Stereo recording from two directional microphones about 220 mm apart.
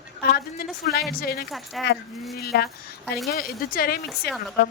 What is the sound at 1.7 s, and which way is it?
Speech, centre (ahead or behind).